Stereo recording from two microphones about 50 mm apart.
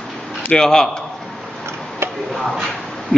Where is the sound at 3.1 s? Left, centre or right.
Centre.